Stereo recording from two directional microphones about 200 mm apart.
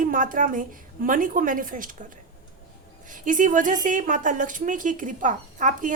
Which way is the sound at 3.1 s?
40° right (ahead or behind).